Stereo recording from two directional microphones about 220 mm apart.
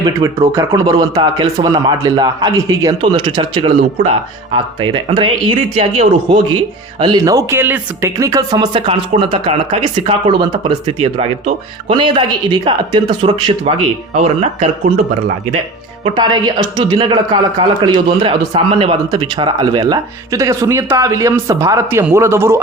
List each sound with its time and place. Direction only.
0.0 s speech: 15° right (ahead or behind)
16.0 s speech: 20° right (ahead or behind)